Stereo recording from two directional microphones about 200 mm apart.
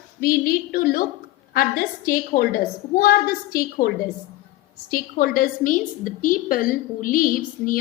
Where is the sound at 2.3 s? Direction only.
45° left (ahead or behind).